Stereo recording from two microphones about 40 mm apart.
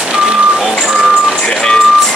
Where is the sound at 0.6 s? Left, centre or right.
Centre.